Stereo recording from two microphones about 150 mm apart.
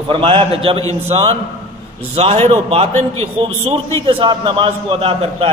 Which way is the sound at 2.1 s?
45° right (ahead or behind).